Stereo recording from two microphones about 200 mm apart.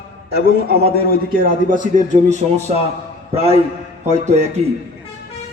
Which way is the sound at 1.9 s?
35° right (ahead or behind).